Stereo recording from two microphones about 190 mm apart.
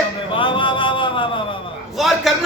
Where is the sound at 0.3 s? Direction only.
25° left (ahead or behind).